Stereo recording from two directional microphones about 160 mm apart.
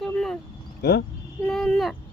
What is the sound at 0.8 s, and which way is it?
Speech, 90° left.